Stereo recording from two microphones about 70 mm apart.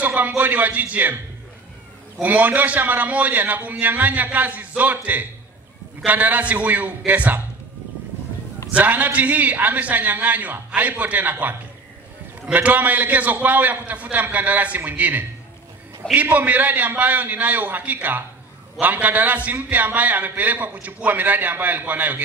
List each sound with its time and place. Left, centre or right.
0.0 s a sound: right
0.4 s a man's voice: right
2.2 s a man's voice: right
8.7 s a man's voice: right
12.5 s a man's voice: right